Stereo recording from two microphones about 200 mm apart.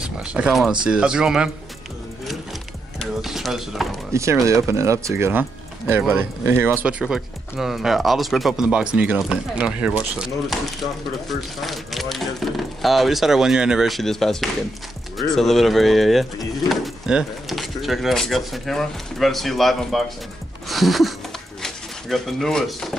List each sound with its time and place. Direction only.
0.0 s speech: 5° right (ahead or behind)
3.0 s speech: centre (ahead or behind)
4.1 s speech: 15° right (ahead or behind)
20.6 s a sound: centre (ahead or behind)
21.6 s speech: centre (ahead or behind)